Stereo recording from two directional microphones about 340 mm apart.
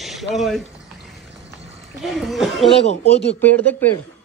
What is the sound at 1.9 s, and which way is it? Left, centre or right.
A man's voice, centre.